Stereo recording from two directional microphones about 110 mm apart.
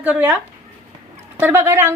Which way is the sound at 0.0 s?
15° right (ahead or behind).